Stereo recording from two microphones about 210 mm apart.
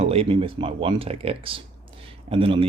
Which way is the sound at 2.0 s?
25° right (ahead or behind).